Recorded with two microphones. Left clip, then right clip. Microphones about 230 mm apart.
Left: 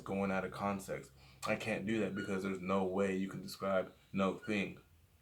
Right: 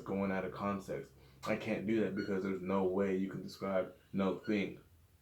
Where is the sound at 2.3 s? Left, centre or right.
Left.